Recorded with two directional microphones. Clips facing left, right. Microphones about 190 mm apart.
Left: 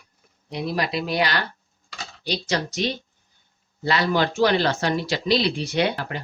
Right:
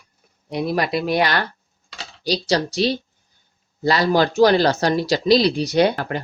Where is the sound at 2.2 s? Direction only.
35° right (ahead or behind).